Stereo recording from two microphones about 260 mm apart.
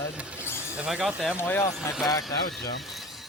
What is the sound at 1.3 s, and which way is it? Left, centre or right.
Speech, centre.